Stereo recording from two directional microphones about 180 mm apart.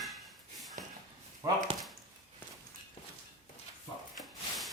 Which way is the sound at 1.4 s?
20° right (ahead or behind).